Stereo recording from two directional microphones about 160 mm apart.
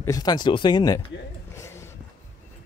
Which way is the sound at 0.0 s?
25° left (ahead or behind).